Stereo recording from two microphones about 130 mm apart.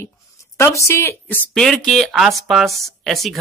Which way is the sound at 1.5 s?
5° left (ahead or behind).